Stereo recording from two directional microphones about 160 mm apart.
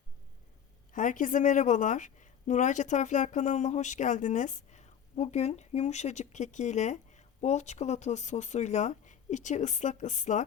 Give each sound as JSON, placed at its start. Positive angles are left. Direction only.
{"t": 0.9, "sound": "a woman's voice", "side_deg": 55}